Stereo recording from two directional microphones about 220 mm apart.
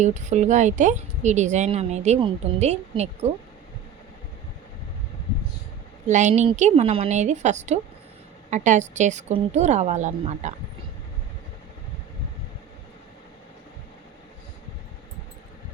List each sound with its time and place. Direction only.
0.0 s speech: 30° right (ahead or behind)
6.1 s speech: 35° right (ahead or behind)